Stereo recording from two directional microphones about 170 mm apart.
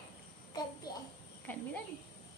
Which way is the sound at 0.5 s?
25° left (ahead or behind).